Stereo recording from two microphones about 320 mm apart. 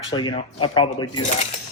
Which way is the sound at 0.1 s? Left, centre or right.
Centre.